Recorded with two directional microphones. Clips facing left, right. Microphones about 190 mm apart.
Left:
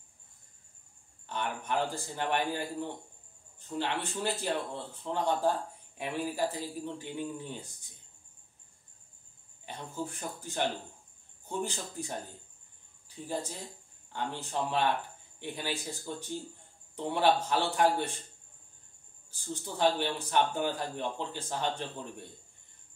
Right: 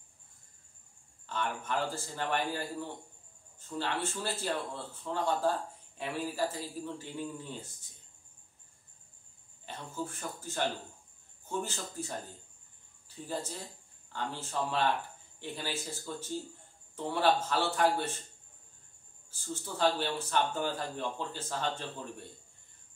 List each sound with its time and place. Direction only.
1.3 s speech: 15° left (ahead or behind)
9.7 s speech: 15° left (ahead or behind)
13.1 s speech: 15° left (ahead or behind)
19.4 s speech: 15° left (ahead or behind)